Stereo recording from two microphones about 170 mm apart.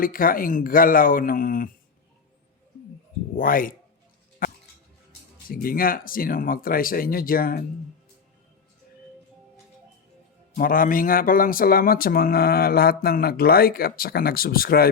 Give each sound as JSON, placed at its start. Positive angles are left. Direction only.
{"t": 0.0, "sound": "speech", "side_deg": 55}
{"t": 3.3, "sound": "speech", "side_deg": 55}
{"t": 4.4, "sound": "a sound", "side_deg": 55}
{"t": 5.5, "sound": "speech", "side_deg": 60}
{"t": 10.5, "sound": "speech", "side_deg": 55}